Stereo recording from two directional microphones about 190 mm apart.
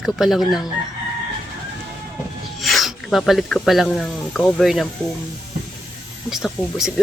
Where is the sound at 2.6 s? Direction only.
Centre (ahead or behind).